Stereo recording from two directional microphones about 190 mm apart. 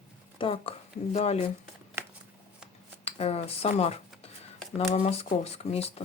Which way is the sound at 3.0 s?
30° left (ahead or behind).